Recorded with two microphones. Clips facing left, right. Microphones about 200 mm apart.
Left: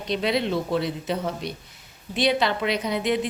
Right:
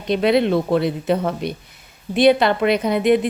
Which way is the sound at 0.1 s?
55° right (ahead or behind).